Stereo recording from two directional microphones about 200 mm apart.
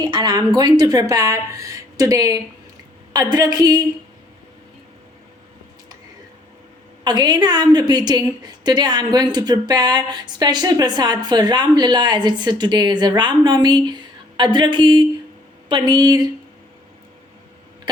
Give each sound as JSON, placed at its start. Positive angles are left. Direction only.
{"t": 0.0, "sound": "a woman's voice", "side_deg": -20}
{"t": 7.0, "sound": "speech", "side_deg": -20}